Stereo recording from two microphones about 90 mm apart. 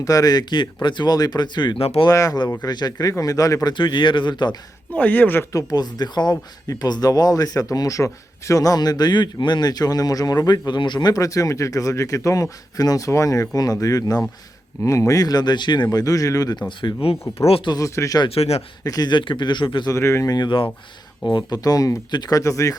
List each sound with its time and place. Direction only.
0.0 s a man's voice: 40° left (ahead or behind); by 2.0 s 70° left (ahead or behind)
2.0 s a man's voice: 40° left (ahead or behind); by 4.5 s 60° left (ahead or behind)
4.9 s speech: 20° left (ahead or behind)
5.5 s a man's voice: 40° left (ahead or behind)
11.1 s a man's voice: 40° left (ahead or behind); by 15.9 s 55° left (ahead or behind)
15.9 s a man's voice: 40° left (ahead or behind)
16.6 s speech: 75° left (ahead or behind)
17.7 s a man's voice: 40° left (ahead or behind)
18.9 s speech: 50° left (ahead or behind)
19.9 s speech: 30° left (ahead or behind)
21.3 s a man's voice: 45° left (ahead or behind)